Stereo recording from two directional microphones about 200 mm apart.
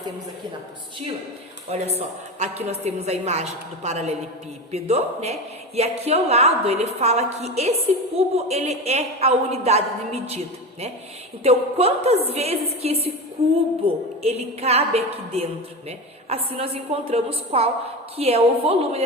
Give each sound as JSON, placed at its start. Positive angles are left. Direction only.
{"t": 2.0, "sound": "a woman's voice", "side_deg": -30}